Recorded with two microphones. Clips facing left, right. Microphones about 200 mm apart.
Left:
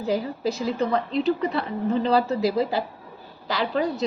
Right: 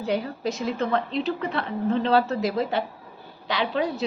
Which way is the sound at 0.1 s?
Centre (ahead or behind).